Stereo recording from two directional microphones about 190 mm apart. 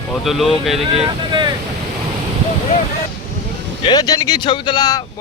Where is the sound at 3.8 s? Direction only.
20° left (ahead or behind).